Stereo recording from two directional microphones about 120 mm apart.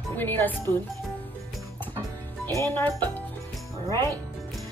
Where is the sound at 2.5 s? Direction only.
20° left (ahead or behind).